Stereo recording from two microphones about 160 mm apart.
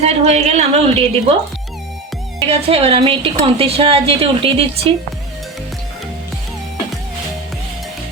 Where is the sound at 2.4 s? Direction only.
40° right (ahead or behind).